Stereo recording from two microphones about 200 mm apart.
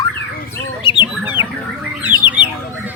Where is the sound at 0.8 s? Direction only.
25° left (ahead or behind).